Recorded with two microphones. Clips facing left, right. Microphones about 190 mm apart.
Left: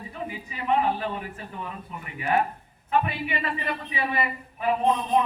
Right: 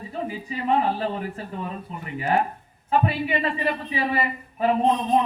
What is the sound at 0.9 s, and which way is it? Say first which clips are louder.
A man's voice: right 4 dB; 35° right (ahead or behind).